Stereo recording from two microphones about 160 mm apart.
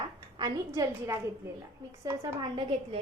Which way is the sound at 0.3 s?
25° right (ahead or behind).